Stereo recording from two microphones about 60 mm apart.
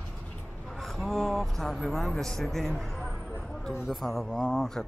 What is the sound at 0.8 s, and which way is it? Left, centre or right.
A man's voice, centre.